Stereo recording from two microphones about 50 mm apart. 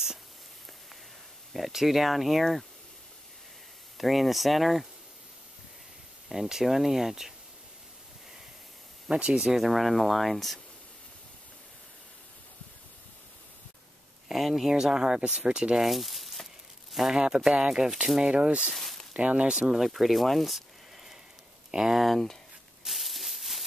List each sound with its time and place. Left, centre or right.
1.5 s speech: centre
4.0 s speech: centre
6.2 s speech: centre
9.1 s speech: centre
9.4 s speech: centre
14.3 s speech: centre
15.8 s speech: centre; by 18.7 s right
18.8 s a sound: centre
19.1 s speech: right; by 20.6 s centre
21.6 s speech: centre
22.0 s speech: centre
22.8 s a sound: centre